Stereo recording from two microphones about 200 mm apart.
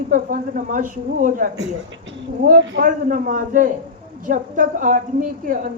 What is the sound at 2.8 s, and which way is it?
A woman's voice, 40° right (ahead or behind).